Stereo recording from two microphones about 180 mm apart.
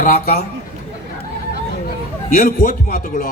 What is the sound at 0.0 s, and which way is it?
Speech, 55° left (ahead or behind).